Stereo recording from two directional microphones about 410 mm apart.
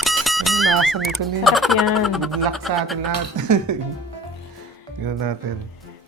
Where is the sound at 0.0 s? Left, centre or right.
Centre.